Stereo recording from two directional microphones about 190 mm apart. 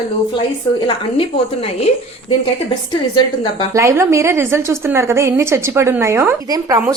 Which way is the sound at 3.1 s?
25° left (ahead or behind).